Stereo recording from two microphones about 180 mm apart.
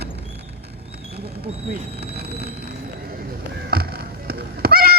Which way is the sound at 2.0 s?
60° right (ahead or behind).